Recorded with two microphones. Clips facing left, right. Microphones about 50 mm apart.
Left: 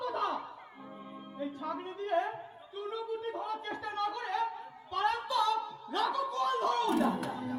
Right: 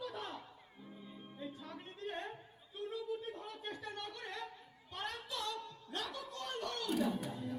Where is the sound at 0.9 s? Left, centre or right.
Left.